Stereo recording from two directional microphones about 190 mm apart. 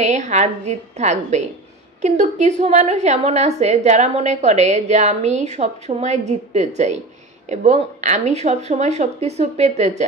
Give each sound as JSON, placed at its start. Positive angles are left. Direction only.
{"t": 0.0, "sound": "a woman's voice", "side_deg": -40}